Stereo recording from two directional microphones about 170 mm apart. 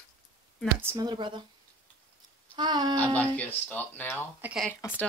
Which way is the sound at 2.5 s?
25° right (ahead or behind).